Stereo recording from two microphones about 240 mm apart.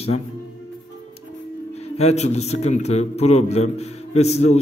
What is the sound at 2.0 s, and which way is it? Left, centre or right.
A man's voice, left.